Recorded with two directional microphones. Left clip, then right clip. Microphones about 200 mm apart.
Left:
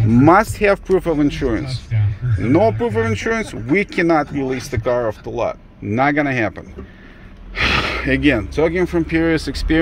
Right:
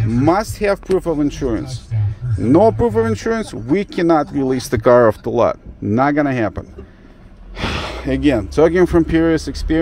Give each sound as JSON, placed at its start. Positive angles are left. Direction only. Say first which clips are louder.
{"t": 0.1, "sound": "speech", "louder": "left 4 dB", "side_deg": 5}
{"t": 2.4, "sound": "speech", "louder": "right 3 dB", "side_deg": -20}
{"t": 5.9, "sound": "speech", "louder": "right 1 dB", "side_deg": -15}
{"t": 7.5, "sound": "gasp", "louder": "left 6 dB", "side_deg": -5}
{"t": 8.5, "sound": "speech", "louder": "right 5 dB", "side_deg": -25}